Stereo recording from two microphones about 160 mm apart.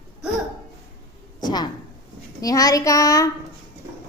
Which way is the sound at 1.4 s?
25° left (ahead or behind).